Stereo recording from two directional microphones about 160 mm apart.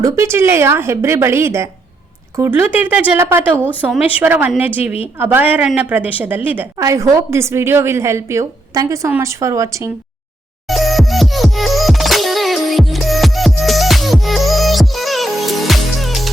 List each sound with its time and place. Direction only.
0.0 s a woman's voice: 15° right (ahead or behind)
3.5 s speech: 10° left (ahead or behind)
3.8 s a woman's voice: 10° right (ahead or behind)
10.7 s music: centre (ahead or behind)